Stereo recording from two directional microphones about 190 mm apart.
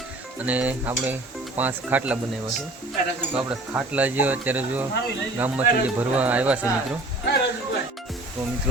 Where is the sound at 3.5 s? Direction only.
10° right (ahead or behind).